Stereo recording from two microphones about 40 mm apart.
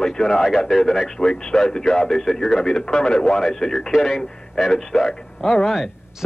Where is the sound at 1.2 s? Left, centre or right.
Centre.